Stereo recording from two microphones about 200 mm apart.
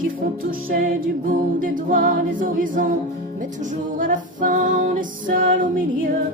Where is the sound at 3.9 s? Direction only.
40° right (ahead or behind).